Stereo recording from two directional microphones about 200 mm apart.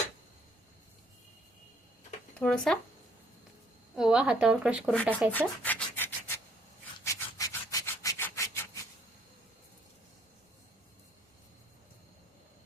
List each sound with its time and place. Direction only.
2.4 s speech: 5° left (ahead or behind)
3.9 s speech: 5° right (ahead or behind)
5.3 s rub: 10° left (ahead or behind)